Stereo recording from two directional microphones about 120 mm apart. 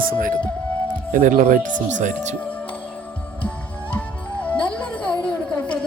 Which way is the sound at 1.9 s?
85° right.